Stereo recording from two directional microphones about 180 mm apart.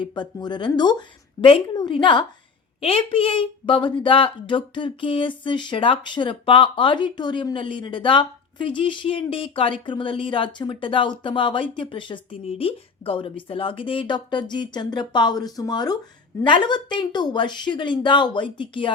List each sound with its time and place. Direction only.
0.0 s a woman's voice: 25° left (ahead or behind)